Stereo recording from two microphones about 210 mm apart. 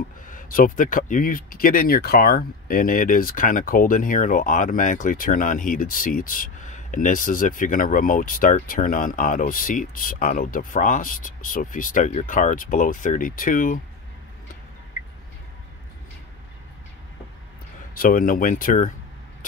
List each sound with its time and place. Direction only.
0.3 s speech: 40° left (ahead or behind)
17.9 s speech: 40° left (ahead or behind)